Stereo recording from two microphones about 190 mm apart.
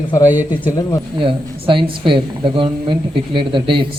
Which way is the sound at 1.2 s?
25° right (ahead or behind).